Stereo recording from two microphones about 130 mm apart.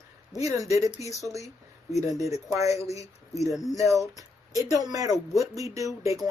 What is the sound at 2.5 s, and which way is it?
Speech, 25° right (ahead or behind).